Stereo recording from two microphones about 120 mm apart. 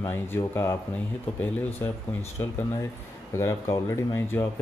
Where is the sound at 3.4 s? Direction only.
25° left (ahead or behind).